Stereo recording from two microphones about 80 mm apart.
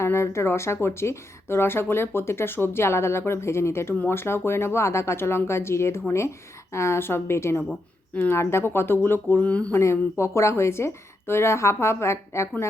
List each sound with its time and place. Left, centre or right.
0.0 s a woman's voice: left; by 9.7 s centre
9.7 s a woman's voice: left